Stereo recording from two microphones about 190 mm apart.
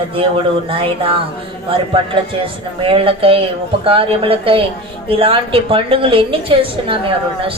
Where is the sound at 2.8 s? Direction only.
30° right (ahead or behind).